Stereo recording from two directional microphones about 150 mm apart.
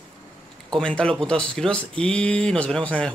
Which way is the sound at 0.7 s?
5° left (ahead or behind).